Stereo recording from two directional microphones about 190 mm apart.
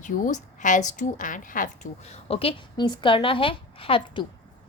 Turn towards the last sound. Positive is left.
turn(degrees=25)  # may be behind; listen again after turning